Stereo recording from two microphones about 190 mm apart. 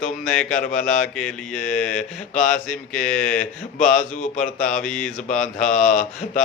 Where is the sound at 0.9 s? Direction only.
5° left (ahead or behind).